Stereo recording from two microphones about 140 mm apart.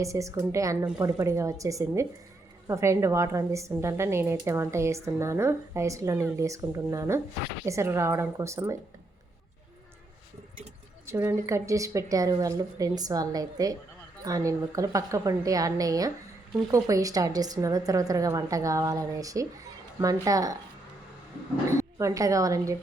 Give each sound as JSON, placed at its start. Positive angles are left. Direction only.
{"t": 0.0, "sound": "a woman's voice", "side_deg": -20}
{"t": 11.0, "sound": "a woman's voice", "side_deg": -20}
{"t": 21.8, "sound": "a woman's voice", "side_deg": -25}